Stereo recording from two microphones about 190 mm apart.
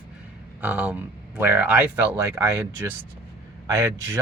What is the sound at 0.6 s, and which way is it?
Speech, 5° right (ahead or behind).